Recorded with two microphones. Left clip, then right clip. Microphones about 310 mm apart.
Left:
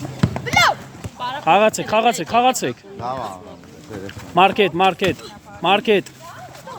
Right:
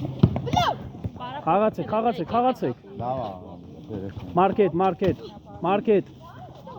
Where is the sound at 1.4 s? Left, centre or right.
Centre.